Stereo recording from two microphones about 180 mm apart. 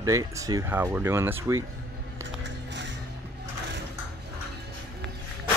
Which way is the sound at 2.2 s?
80° right.